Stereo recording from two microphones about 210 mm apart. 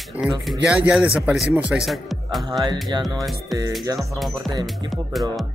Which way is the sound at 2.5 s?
20° right (ahead or behind).